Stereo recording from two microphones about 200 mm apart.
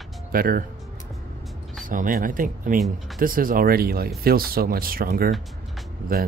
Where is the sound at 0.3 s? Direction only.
45° right (ahead or behind).